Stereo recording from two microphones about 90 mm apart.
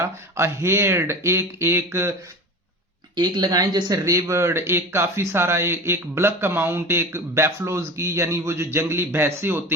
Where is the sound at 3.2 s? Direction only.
50° right (ahead or behind).